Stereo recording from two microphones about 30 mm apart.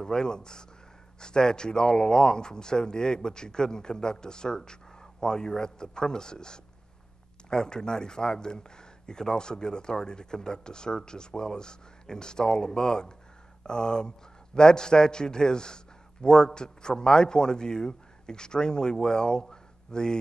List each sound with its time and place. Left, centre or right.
0.0 s a man's voice: left